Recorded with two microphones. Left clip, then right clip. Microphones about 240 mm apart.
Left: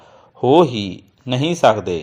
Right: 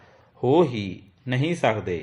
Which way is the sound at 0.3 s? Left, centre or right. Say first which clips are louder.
Left 7 dB; left.